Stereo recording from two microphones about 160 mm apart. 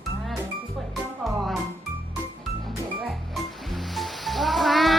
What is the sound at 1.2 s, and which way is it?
Music, centre (ahead or behind).